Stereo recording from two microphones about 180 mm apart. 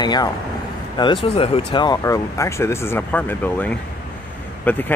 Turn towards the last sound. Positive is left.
turn(degrees=10)  # may be behind; listen again after turning